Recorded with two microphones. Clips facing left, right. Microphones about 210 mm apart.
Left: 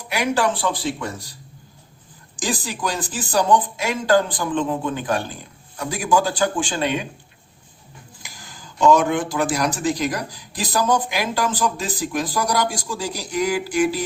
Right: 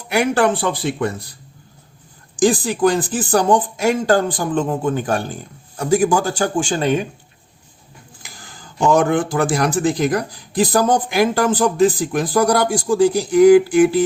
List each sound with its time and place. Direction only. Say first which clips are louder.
0.1 s speech: right 5 dB; 55° right (ahead or behind)
2.4 s speech: right 11 dB; 55° right (ahead or behind)
8.2 s speech: right 2 dB; 50° right (ahead or behind)